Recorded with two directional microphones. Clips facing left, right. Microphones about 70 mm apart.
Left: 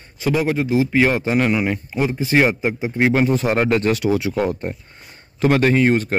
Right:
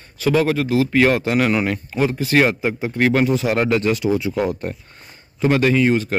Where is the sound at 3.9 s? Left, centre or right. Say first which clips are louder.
Even; left.